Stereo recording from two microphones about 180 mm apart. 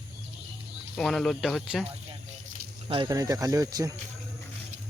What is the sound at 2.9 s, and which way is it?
Speech, 25° right (ahead or behind).